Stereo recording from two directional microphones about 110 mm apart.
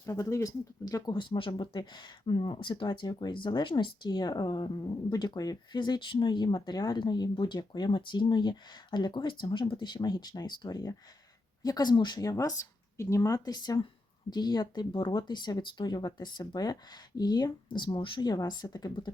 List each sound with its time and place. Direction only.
0.0 s speech: 30° left (ahead or behind)